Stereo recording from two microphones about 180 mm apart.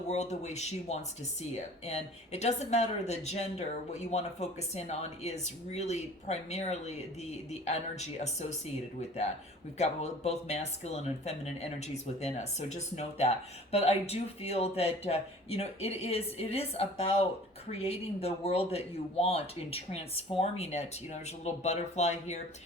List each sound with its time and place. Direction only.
0.1 s speech: 40° left (ahead or behind)